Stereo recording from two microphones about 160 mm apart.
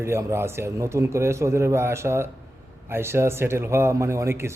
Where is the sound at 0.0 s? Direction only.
15° right (ahead or behind).